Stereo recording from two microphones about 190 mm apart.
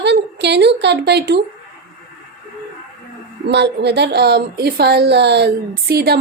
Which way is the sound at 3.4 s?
65° right (ahead or behind).